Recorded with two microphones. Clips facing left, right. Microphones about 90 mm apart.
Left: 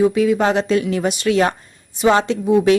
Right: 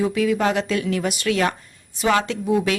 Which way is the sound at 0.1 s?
25° left (ahead or behind).